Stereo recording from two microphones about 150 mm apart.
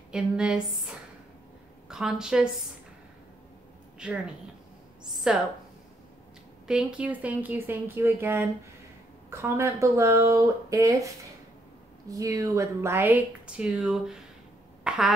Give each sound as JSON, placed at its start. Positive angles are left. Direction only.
{"t": 0.1, "sound": "a woman's voice", "side_deg": -5}
{"t": 5.2, "sound": "a woman's voice", "side_deg": -5}
{"t": 6.7, "sound": "speech", "side_deg": -5}
{"t": 12.1, "sound": "speech", "side_deg": -25}
{"t": 14.8, "sound": "a sound", "side_deg": -5}